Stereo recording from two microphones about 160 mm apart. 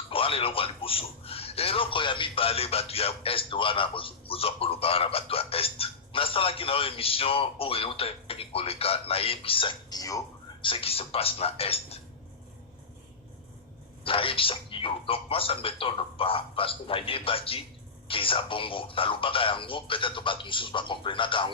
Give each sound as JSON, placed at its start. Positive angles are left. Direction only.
{"t": 0.1, "sound": "speech", "side_deg": 35}
{"t": 10.7, "sound": "speech", "side_deg": 35}
{"t": 14.0, "sound": "speech", "side_deg": 35}